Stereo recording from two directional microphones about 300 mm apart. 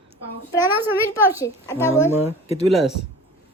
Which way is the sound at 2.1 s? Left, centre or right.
Centre.